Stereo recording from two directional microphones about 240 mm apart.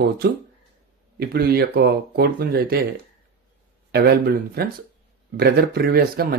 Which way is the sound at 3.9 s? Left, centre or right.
Right.